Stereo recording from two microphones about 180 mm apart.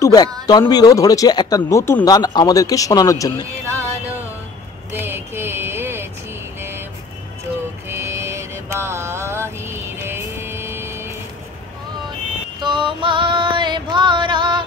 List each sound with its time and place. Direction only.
0.0 s speech: 20° left (ahead or behind)
4.9 s a sound: 10° right (ahead or behind)
7.9 s mantra: 15° right (ahead or behind)
12.5 s music: 25° right (ahead or behind)